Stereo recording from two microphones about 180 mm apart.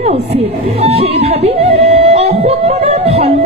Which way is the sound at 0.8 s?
35° right (ahead or behind).